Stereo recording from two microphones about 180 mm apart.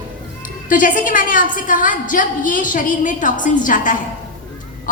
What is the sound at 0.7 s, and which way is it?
A woman's voice, 45° left (ahead or behind).